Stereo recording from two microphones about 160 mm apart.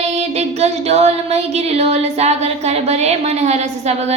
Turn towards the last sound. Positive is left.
turn(degrees=-45)  # may be behind; listen again after turning